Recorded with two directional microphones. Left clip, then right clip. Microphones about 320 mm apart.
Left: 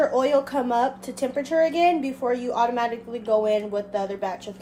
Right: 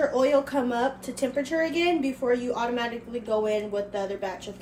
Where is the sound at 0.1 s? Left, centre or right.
Left.